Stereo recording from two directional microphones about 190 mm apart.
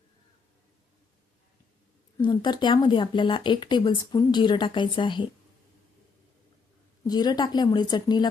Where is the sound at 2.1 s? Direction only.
25° left (ahead or behind).